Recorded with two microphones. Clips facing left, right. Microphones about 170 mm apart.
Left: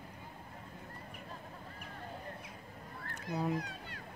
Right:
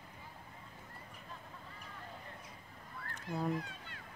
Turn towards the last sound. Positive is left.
turn(degrees=40)  # may be behind; listen again after turning